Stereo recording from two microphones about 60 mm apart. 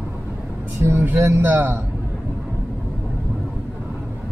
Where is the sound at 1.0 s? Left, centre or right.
Right.